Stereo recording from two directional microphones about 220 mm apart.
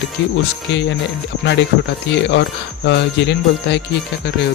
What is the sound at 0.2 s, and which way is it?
Music, 55° left (ahead or behind).